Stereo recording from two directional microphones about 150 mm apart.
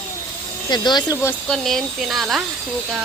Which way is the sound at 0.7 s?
30° left (ahead or behind).